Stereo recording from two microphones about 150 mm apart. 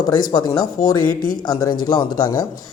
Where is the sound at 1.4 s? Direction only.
25° left (ahead or behind).